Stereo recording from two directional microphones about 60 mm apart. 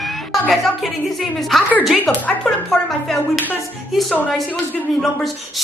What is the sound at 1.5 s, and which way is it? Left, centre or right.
Speech, centre.